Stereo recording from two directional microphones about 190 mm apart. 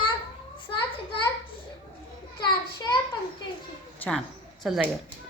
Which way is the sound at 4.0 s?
5° left (ahead or behind).